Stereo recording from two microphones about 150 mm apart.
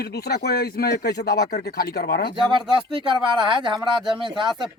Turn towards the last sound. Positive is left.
turn(degrees=-35)  # may be behind; listen again after turning